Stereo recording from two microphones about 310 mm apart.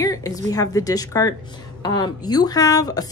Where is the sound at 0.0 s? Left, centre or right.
Centre.